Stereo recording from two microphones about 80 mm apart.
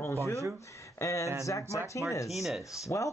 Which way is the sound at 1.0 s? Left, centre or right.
Left.